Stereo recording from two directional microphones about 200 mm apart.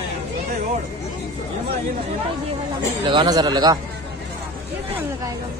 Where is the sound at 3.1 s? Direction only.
20° right (ahead or behind).